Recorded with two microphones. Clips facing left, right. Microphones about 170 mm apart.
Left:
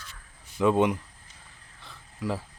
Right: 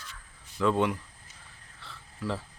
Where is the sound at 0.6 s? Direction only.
20° left (ahead or behind).